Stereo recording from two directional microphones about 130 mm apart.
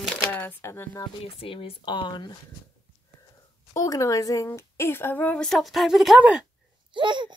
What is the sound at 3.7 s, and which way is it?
A woman's voice, 25° left (ahead or behind).